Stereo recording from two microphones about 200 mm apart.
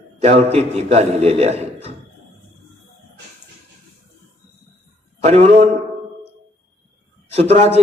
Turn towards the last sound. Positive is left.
turn(degrees=-30)  # may be behind; listen again after turning